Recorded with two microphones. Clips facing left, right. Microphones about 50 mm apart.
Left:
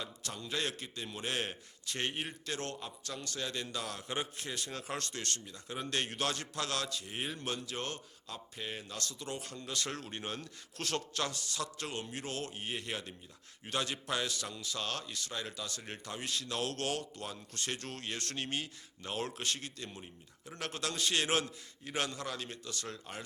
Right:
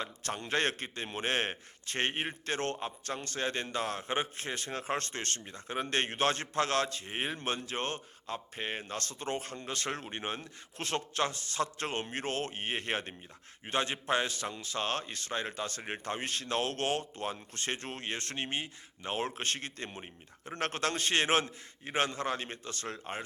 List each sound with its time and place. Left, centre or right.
0.0 s a man's voice: right